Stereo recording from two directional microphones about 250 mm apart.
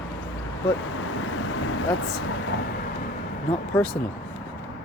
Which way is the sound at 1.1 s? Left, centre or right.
Left.